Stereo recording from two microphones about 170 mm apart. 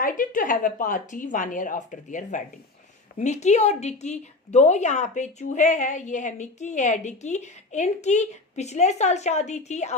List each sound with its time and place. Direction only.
0.0 s a woman's voice: 55° left (ahead or behind)